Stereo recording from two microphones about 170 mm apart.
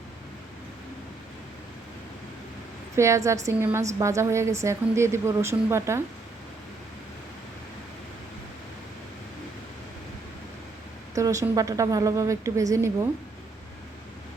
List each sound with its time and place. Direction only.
2.9 s a woman's voice: 15° right (ahead or behind)
11.1 s a woman's voice: 20° right (ahead or behind)